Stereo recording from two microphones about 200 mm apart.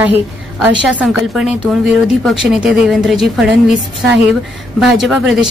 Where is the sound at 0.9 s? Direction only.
5° right (ahead or behind).